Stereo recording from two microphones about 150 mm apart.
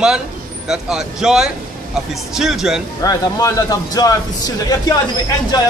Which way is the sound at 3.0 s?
25° left (ahead or behind).